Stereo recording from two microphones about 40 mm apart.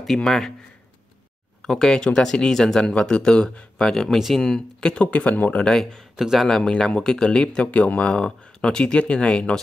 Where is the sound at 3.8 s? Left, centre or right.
Centre.